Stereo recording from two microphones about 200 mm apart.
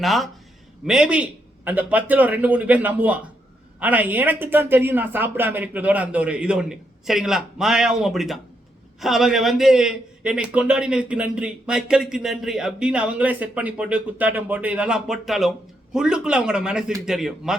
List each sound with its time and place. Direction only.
0.0 s a man's voice: centre (ahead or behind)